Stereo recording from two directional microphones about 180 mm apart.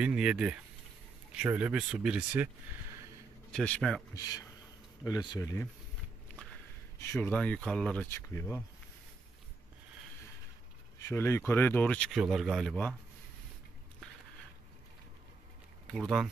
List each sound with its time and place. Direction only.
0.0 s speech: 5° right (ahead or behind)
3.5 s speech: 5° left (ahead or behind)
4.1 s speech: 20° left (ahead or behind)
7.0 s speech: 10° left (ahead or behind)
11.0 s speech: 15° left (ahead or behind)
15.9 s speech: centre (ahead or behind)